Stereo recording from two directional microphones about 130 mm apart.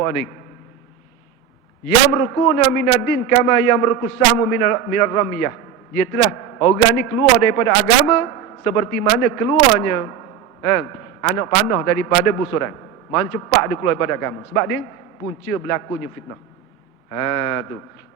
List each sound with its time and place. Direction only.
2.0 s a man's voice: 20° left (ahead or behind)
6.6 s a man's voice: 25° left (ahead or behind)
17.1 s a man's voice: 25° left (ahead or behind)